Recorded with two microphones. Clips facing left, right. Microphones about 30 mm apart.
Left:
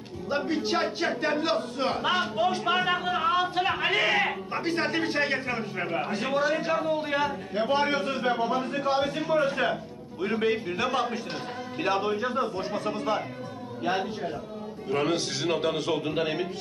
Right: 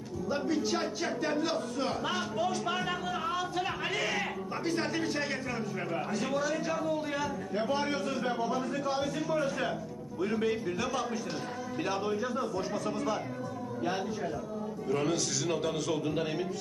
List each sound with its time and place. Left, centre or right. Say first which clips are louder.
0.3 s a man's voice: left 4 dB; left